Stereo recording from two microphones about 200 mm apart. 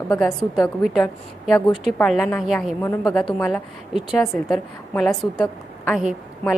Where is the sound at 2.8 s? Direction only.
15° left (ahead or behind).